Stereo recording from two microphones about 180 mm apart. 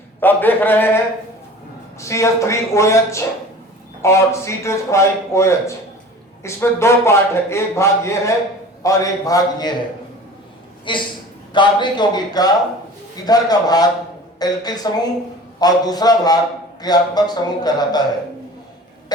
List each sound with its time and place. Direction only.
0.2 s a man's voice: 10° left (ahead or behind)
2.0 s a man's voice: 15° left (ahead or behind)
10.9 s speech: 25° left (ahead or behind)